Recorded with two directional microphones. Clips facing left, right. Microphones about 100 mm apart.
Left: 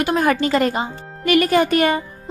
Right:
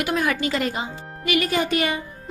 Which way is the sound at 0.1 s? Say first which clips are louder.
Left 7 dB; 50° left (ahead or behind).